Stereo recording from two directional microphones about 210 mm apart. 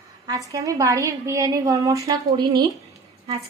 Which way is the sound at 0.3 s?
15° right (ahead or behind).